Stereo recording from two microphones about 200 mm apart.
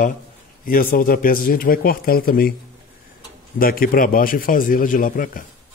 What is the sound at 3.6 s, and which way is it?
A man's voice, 45° left (ahead or behind).